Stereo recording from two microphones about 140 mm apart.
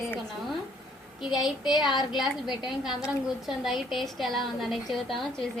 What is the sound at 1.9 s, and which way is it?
Speech, 30° left (ahead or behind).